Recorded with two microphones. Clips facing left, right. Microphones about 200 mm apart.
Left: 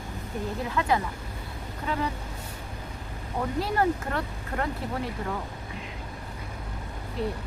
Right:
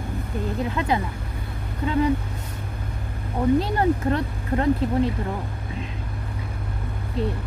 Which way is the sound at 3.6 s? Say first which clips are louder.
Right 4 dB; 20° right (ahead or behind).